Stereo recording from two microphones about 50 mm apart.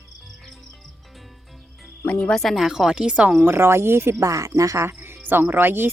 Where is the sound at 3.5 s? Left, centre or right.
Right.